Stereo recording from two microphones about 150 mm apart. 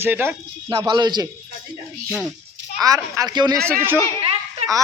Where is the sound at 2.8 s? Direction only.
25° right (ahead or behind).